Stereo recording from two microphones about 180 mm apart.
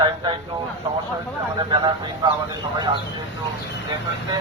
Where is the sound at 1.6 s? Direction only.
25° right (ahead or behind).